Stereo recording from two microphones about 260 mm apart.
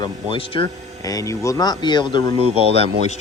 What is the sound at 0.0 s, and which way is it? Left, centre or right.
Speech, centre.